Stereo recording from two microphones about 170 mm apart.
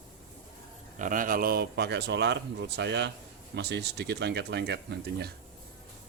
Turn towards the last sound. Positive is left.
turn(degrees=-80)